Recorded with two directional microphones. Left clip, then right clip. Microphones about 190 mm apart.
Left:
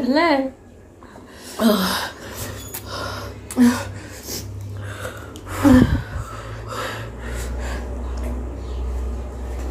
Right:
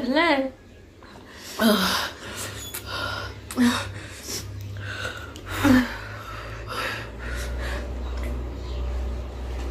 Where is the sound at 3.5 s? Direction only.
25° left (ahead or behind).